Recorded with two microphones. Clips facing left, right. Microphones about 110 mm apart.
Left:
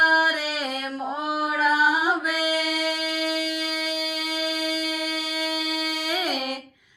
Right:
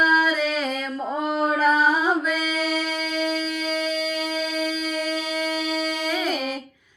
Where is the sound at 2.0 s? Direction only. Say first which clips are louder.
Right 2 dB; 10° left (ahead or behind).